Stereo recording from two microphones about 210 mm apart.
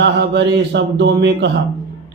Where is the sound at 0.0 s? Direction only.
55° right (ahead or behind).